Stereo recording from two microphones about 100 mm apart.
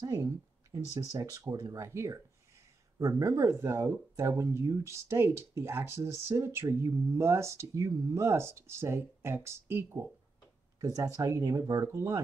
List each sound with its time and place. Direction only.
0.0 s speech: 30° right (ahead or behind)